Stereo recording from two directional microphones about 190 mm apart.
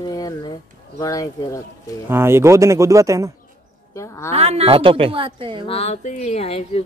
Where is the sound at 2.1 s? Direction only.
15° right (ahead or behind).